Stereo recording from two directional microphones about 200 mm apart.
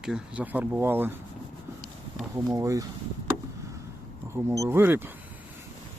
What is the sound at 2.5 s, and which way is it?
Speech, 15° right (ahead or behind).